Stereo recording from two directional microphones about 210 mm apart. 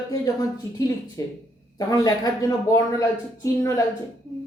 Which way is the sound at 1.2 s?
15° left (ahead or behind).